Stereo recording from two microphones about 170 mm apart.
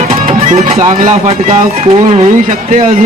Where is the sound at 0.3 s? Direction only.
45° right (ahead or behind).